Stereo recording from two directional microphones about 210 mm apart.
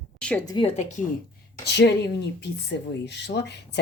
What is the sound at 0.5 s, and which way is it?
Speech, 30° left (ahead or behind).